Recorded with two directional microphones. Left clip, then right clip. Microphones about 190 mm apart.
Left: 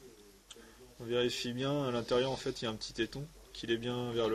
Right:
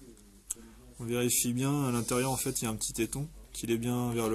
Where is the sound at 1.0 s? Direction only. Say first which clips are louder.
Right 2 dB; 30° right (ahead or behind).